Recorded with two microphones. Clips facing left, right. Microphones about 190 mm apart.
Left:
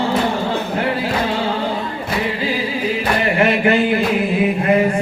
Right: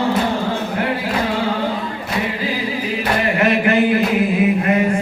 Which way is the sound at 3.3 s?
30° left (ahead or behind).